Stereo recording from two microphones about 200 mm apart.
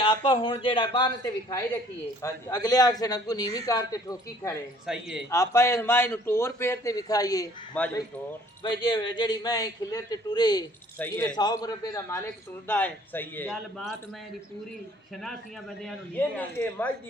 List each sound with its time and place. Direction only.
0.0 s a man's voice: 25° left (ahead or behind)
4.9 s speech: 5° right (ahead or behind)
5.3 s a man's voice: 15° left (ahead or behind)
7.8 s a man's voice: 5° left (ahead or behind)
8.9 s a man's voice: 20° left (ahead or behind)
10.9 s a man's voice: 10° left (ahead or behind)
11.3 s a man's voice: 20° left (ahead or behind); by 13.9 s centre (ahead or behind)
15.8 s a man's voice: 5° left (ahead or behind)